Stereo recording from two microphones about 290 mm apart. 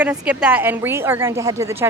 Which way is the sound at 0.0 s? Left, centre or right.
Centre.